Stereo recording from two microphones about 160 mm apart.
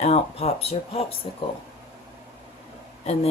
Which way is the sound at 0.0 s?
40° left (ahead or behind).